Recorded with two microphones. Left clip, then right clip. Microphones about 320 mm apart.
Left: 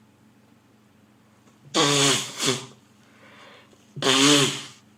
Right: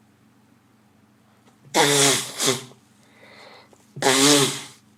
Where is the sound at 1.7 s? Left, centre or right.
Right.